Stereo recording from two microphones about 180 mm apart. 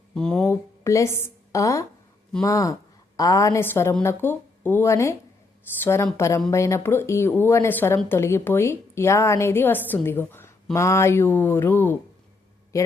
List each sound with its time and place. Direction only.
0.1 s speech: 5° left (ahead or behind)
0.4 s a woman's voice: 15° left (ahead or behind)